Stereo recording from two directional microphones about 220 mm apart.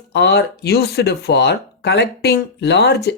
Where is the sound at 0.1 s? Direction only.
50° left (ahead or behind).